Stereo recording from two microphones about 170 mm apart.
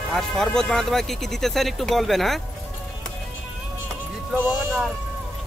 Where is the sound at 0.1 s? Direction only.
Centre (ahead or behind).